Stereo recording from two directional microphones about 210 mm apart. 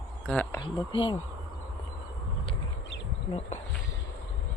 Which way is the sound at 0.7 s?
20° left (ahead or behind).